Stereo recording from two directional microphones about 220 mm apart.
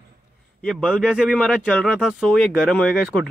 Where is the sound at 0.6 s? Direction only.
5° left (ahead or behind).